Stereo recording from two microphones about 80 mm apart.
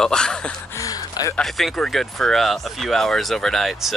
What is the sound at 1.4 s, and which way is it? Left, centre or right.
Speech, centre.